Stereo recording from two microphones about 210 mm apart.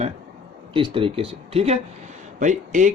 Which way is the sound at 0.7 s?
25° right (ahead or behind).